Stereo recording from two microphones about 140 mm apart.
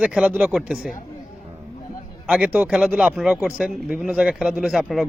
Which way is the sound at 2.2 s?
10° right (ahead or behind).